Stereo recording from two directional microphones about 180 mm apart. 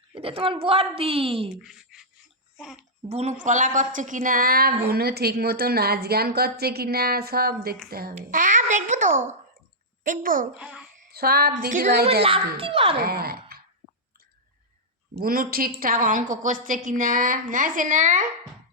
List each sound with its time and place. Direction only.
0.1 s a woman's voice: 30° right (ahead or behind)
1.6 s speech: 5° right (ahead or behind)
3.1 s a woman's voice: 35° right (ahead or behind)
10.6 s a child's voice: 5° right (ahead or behind)
11.1 s a woman's voice: 60° right (ahead or behind)
12.2 s a woman's voice: 30° right (ahead or behind)
13.0 s speech: 60° right (ahead or behind)
15.2 s a woman's voice: 55° right (ahead or behind)